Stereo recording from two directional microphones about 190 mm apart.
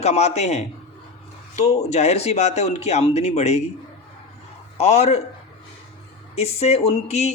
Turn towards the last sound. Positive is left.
turn(degrees=35)  # may be behind; listen again after turning